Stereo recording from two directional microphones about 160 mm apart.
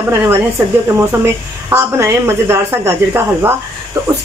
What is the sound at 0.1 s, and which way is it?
Speech, 15° right (ahead or behind).